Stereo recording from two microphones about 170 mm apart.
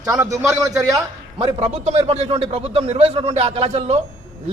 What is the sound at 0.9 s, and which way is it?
A man's voice, 30° right (ahead or behind).